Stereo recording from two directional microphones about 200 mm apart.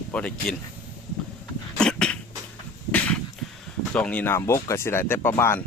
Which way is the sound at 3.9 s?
5° left (ahead or behind).